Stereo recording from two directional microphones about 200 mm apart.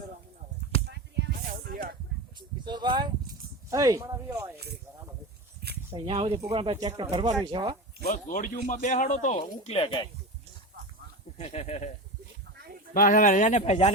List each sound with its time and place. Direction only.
0.9 s a sound: 50° right (ahead or behind)
2.6 s speech: 20° right (ahead or behind)
5.9 s speech: 30° right (ahead or behind)
8.0 s speech: 40° left (ahead or behind)
11.3 s speech: 35° left (ahead or behind)
12.5 s a sound: 50° right (ahead or behind)
12.9 s speech: 45° left (ahead or behind)